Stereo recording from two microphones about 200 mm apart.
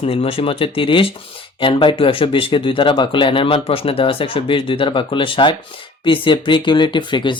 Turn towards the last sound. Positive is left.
turn(degrees=25)  # may be behind; listen again after turning